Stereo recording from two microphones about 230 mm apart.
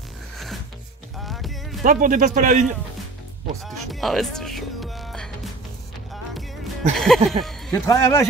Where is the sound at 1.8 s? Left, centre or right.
Right.